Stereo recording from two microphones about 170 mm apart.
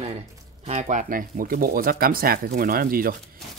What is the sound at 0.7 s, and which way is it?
Speech, 40° right (ahead or behind).